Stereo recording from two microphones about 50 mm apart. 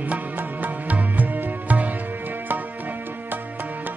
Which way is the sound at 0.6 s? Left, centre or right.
Right.